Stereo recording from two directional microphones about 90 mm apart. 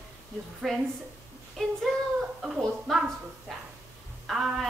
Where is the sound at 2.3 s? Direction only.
5° right (ahead or behind).